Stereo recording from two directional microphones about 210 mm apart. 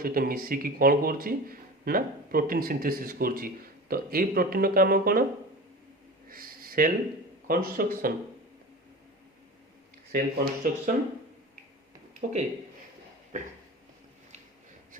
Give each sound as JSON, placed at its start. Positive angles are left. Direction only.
{"t": 0.0, "sound": "a man's voice", "side_deg": -40}
{"t": 6.2, "sound": "a sound", "side_deg": -45}
{"t": 7.4, "sound": "a man's voice", "side_deg": -45}
{"t": 10.1, "sound": "a man's voice", "side_deg": -45}
{"t": 12.2, "sound": "a man's voice", "side_deg": -45}